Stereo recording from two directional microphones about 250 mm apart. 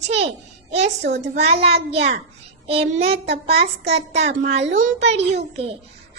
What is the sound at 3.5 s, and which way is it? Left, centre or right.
Speech, right.